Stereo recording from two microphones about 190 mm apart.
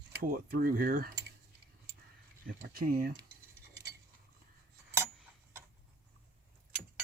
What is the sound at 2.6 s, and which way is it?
Speech, 50° right (ahead or behind).